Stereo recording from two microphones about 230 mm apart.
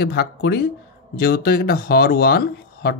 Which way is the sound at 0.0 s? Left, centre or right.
Left.